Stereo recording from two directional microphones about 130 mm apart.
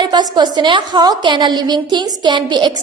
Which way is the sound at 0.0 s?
35° right (ahead or behind).